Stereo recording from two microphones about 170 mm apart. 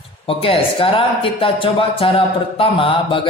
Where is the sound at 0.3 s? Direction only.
30° left (ahead or behind).